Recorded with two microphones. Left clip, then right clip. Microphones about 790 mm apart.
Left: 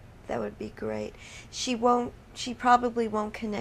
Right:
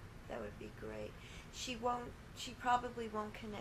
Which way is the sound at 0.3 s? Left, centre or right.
Left.